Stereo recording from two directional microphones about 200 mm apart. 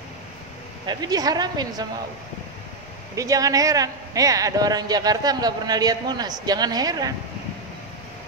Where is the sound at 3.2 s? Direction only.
15° right (ahead or behind).